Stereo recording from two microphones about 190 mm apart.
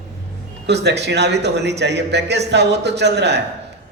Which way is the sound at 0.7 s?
60° right (ahead or behind).